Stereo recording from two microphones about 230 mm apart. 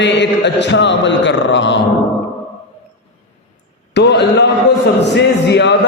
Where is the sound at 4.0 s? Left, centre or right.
Left.